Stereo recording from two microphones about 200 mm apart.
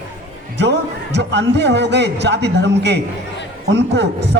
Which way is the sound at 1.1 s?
60° right (ahead or behind).